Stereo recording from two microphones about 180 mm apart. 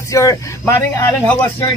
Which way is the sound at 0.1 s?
15° left (ahead or behind).